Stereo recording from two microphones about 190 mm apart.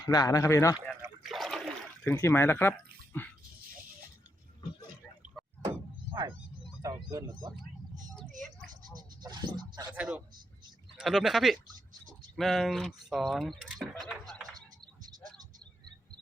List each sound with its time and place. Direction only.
0.0 s speech: 20° left (ahead or behind)
1.0 s toilet flush: centre (ahead or behind)
2.0 s speech: 15° left (ahead or behind)
6.8 s speech: 15° right (ahead or behind)
9.2 s a sound: 20° right (ahead or behind)
9.9 s speech: 5° right (ahead or behind)
14.0 s a sound: centre (ahead or behind)